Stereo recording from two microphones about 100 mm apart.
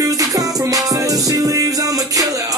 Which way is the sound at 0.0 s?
35° right (ahead or behind).